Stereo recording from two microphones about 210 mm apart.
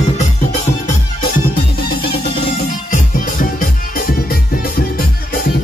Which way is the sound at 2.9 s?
40° left (ahead or behind).